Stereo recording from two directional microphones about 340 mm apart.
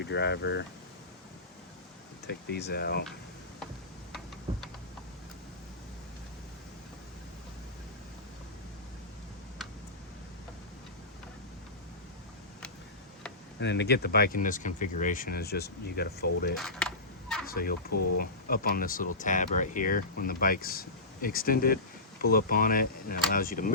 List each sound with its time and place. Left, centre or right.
0.0 s speech: left
2.2 s speech: left
13.6 s speech: left
16.6 s a sound: centre
17.4 s speech: left
17.9 s speech: left
18.2 s speech: left